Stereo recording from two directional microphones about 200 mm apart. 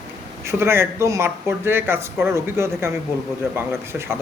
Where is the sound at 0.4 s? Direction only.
10° right (ahead or behind).